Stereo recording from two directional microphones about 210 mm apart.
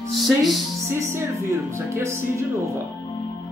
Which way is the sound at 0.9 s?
10° right (ahead or behind).